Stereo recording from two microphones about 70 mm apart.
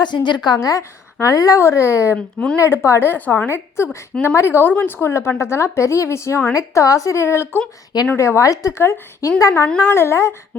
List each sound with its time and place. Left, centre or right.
0.0 s a woman's voice: left
0.7 s speech: left
1.5 s a woman's voice: left
2.1 s speech: centre
2.6 s a woman's voice: left
6.5 s a woman's voice: left
8.4 s a woman's voice: left
10.5 s a sound: left